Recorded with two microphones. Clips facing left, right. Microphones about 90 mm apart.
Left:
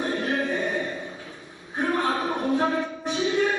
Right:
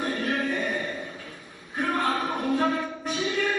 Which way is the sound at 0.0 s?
30° left (ahead or behind).